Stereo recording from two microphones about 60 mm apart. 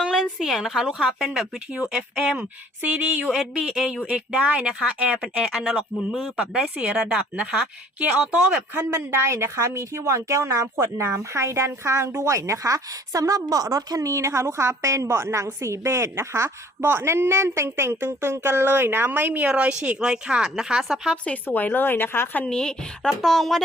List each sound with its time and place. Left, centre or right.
0.0 s a woman's voice: centre
2.8 s speech: right
3.2 s speech: centre
4.3 s speech: right; by 6.3 s centre
6.3 s speech: centre
8.7 s a woman's voice: right
19.5 s speech: centre
21.4 s speech: left
22.4 s speech: centre